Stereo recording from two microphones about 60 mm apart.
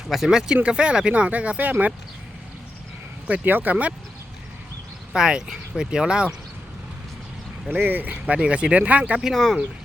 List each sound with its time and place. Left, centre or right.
0.1 s speech: centre; by 1.9 s right
3.2 s speech: right
5.1 s speech: centre
7.7 s speech: right
9.3 s speech: centre